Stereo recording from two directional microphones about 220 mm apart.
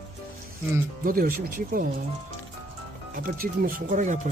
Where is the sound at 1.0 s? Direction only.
40° right (ahead or behind).